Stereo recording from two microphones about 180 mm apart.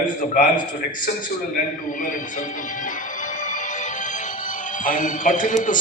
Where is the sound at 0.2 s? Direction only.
45° left (ahead or behind).